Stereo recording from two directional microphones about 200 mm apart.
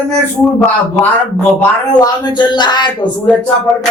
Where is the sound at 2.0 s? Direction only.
20° left (ahead or behind).